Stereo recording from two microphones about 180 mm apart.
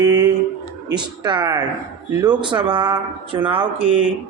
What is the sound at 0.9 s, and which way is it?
Speech, 25° right (ahead or behind).